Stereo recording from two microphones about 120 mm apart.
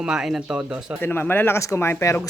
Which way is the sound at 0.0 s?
5° right (ahead or behind).